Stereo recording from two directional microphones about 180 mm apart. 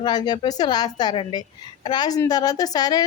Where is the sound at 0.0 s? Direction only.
25° left (ahead or behind).